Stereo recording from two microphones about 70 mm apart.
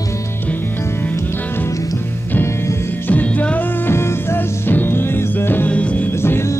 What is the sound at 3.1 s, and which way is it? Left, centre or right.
Music, left.